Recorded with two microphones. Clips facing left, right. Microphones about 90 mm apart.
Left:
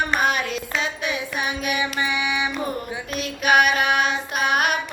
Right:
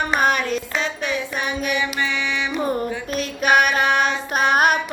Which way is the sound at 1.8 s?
15° left (ahead or behind).